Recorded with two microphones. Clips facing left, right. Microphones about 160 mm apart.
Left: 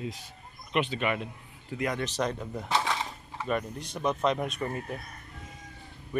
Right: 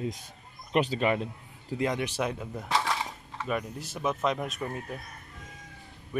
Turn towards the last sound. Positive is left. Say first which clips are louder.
# left 1 dB
turn(degrees=-5)  # may be behind; listen again after turning